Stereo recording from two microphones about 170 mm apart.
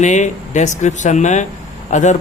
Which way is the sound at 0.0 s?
45° left (ahead or behind).